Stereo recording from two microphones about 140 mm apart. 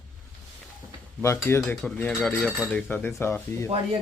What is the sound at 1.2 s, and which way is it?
Speech, 20° left (ahead or behind).